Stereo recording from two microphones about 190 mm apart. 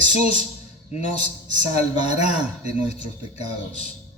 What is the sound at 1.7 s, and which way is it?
Speech, 35° left (ahead or behind).